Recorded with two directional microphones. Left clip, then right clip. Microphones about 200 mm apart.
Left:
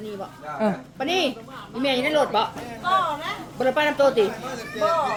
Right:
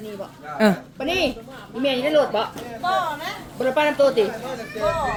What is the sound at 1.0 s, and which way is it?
Speech, 5° left (ahead or behind).